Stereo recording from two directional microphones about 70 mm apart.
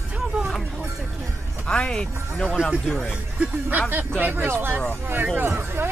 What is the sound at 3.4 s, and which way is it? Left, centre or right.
Speech, centre.